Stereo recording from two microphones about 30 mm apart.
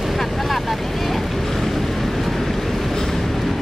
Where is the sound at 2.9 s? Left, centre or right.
Centre.